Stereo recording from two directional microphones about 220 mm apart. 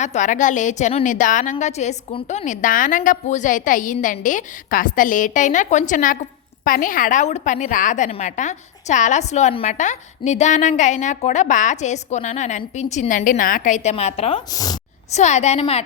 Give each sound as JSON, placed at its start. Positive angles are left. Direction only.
{"t": 0.0, "sound": "a woman's voice", "side_deg": 35}
{"t": 15.1, "sound": "a woman's voice", "side_deg": 30}